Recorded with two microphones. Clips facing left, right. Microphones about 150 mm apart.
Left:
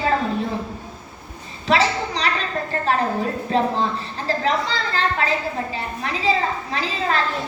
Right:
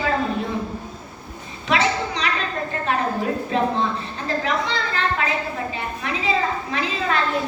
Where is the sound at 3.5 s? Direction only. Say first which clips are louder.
Left 2 dB; 35° left (ahead or behind).